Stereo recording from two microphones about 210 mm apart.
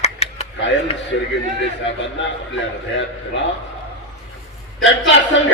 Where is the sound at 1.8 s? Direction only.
60° left (ahead or behind).